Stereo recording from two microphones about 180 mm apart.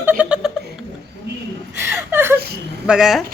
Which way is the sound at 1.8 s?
15° right (ahead or behind).